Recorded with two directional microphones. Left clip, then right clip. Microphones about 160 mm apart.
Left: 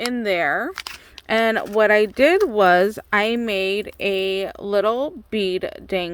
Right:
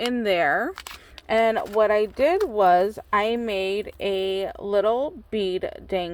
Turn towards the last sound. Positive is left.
turn(degrees=40)  # may be behind; listen again after turning